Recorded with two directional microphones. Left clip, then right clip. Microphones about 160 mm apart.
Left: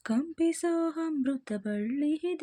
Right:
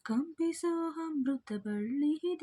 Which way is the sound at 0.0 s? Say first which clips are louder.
Left 5 dB; 25° left (ahead or behind).